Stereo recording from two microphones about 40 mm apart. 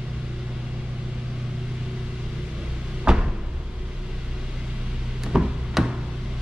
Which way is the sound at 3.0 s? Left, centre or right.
Centre.